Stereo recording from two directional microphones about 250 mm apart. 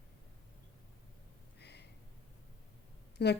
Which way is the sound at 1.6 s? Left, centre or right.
Left.